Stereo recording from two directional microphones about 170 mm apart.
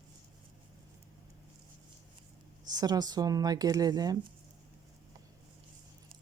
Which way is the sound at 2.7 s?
25° right (ahead or behind).